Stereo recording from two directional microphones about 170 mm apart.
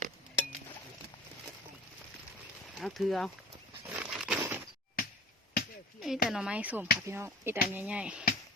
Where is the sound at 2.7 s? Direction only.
Centre (ahead or behind).